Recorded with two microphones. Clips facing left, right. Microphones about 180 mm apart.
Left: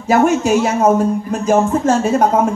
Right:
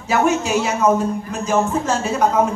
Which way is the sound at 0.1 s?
45° left (ahead or behind).